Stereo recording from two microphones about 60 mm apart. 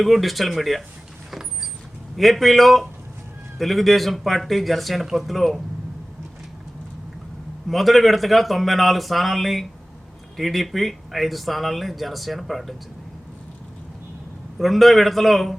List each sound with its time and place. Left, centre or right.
0.0 s speech: centre
1.3 s vehicle: centre
2.1 s speech: centre
7.7 s speech: centre
14.6 s speech: centre